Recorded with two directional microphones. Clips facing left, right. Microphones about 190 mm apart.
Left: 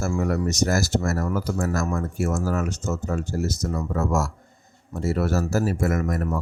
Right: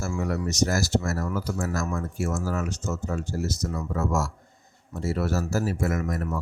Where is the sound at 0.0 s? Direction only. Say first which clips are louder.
Left 4 dB; 50° left (ahead or behind).